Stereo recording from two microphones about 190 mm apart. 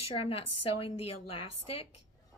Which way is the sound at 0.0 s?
30° left (ahead or behind).